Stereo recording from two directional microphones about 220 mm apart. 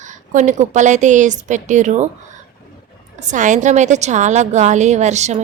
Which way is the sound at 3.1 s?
35° right (ahead or behind).